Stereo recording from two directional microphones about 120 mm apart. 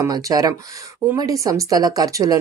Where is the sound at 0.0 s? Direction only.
30° right (ahead or behind).